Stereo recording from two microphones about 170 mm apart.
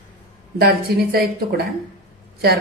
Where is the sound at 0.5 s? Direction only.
65° right (ahead or behind).